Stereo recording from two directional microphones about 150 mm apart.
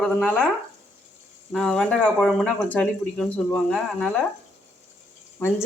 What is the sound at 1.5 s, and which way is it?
Speech, 5° left (ahead or behind).